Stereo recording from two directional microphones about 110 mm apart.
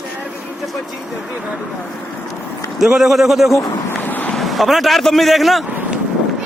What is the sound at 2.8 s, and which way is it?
Speech, 5° right (ahead or behind).